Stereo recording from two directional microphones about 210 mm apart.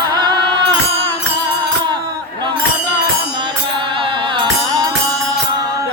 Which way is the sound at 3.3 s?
20° right (ahead or behind).